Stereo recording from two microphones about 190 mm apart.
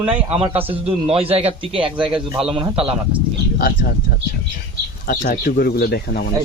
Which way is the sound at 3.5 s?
50° left (ahead or behind).